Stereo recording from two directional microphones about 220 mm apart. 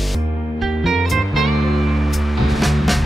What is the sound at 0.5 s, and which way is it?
Music, centre (ahead or behind).